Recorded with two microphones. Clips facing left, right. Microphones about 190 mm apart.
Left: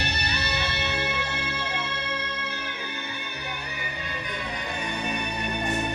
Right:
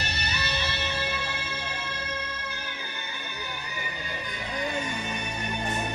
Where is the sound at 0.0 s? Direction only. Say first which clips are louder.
Left 3 dB; 65° left (ahead or behind).